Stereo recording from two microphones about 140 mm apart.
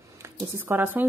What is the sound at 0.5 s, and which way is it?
Speech, 15° right (ahead or behind).